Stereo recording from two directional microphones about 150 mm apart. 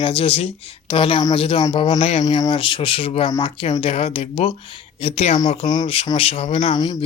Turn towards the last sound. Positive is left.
turn(degrees=30)  # may be behind; listen again after turning